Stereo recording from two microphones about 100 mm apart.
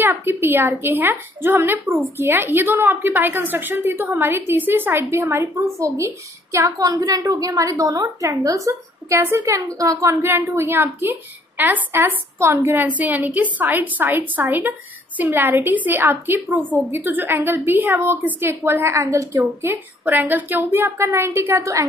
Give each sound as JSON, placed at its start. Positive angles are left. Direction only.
{"t": 0.0, "sound": "a woman's voice", "side_deg": -25}